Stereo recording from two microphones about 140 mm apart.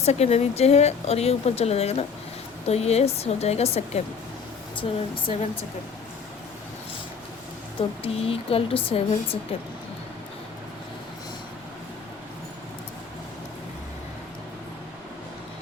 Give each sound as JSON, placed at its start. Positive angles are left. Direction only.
{"t": 0.0, "sound": "speech", "side_deg": 50}
{"t": 4.8, "sound": "speech", "side_deg": 35}
{"t": 7.8, "sound": "speech", "side_deg": 45}